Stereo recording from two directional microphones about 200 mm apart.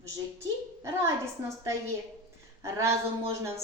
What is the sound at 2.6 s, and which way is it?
Speech, 15° right (ahead or behind).